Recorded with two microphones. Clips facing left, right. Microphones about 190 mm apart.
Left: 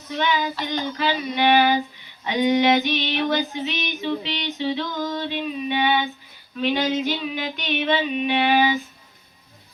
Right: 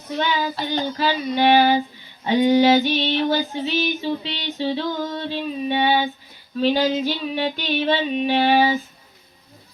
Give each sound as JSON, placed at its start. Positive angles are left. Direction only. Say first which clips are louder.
{"t": 0.2, "sound": "female singing", "louder": "even", "side_deg": -35}